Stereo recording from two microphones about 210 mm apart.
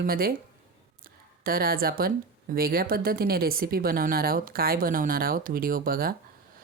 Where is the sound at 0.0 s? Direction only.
45° right (ahead or behind).